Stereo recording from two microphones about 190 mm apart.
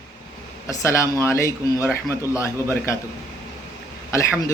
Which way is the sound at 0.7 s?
15° left (ahead or behind).